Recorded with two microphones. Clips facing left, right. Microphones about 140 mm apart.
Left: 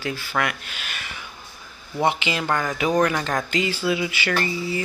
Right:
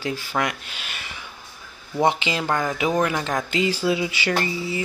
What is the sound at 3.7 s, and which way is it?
Speech, 35° right (ahead or behind).